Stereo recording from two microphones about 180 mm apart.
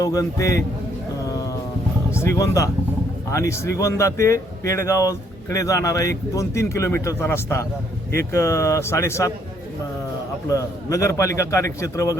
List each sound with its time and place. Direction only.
0.0 s speech: 20° left (ahead or behind)
2.1 s speech: 15° left (ahead or behind)
10.5 s speech: 20° left (ahead or behind)